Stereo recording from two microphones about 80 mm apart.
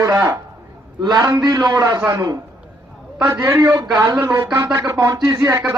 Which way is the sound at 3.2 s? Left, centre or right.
Right.